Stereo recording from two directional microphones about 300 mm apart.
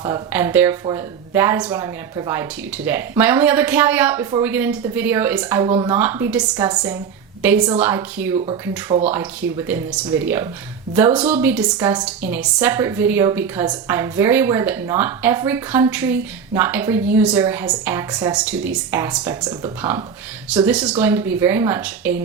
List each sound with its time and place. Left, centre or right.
0.0 s speech: centre
5.6 s speech: centre
5.9 s a woman's voice: centre